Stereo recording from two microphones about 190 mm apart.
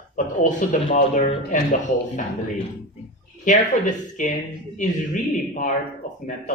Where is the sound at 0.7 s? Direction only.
40° left (ahead or behind).